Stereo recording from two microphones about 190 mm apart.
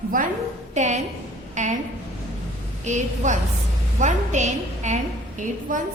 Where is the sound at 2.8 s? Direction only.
40° right (ahead or behind).